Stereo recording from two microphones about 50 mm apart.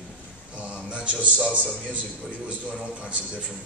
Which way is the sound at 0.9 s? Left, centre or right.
Right.